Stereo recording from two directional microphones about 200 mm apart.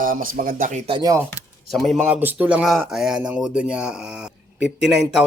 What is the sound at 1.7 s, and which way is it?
A man's voice, centre (ahead or behind).